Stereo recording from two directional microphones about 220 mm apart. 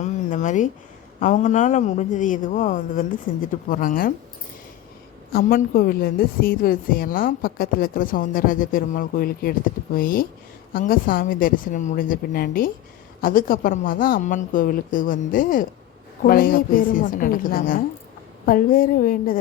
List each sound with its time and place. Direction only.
0.0 s a sound: 35° left (ahead or behind)
1.2 s a woman's voice: 35° left (ahead or behind)
5.3 s a woman's voice: 40° left (ahead or behind)